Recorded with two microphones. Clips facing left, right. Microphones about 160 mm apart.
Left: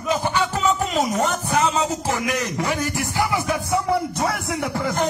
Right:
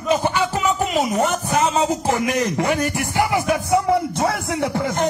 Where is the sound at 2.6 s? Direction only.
60° right (ahead or behind).